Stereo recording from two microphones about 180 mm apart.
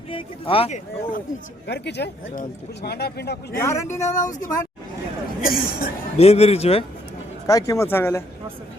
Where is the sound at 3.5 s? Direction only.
15° left (ahead or behind).